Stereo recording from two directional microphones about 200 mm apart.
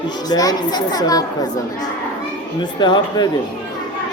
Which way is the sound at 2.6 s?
20° left (ahead or behind).